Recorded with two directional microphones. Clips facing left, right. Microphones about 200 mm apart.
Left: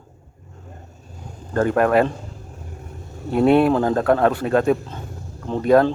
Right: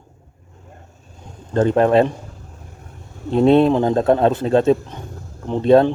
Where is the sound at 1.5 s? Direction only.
25° right (ahead or behind).